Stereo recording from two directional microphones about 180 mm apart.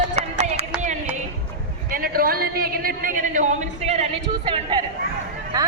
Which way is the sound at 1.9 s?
55° right (ahead or behind).